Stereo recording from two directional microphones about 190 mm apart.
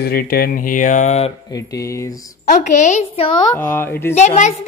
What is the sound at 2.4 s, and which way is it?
A woman's voice, 40° left (ahead or behind).